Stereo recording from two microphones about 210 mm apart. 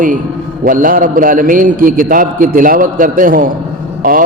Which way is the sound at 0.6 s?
40° right (ahead or behind).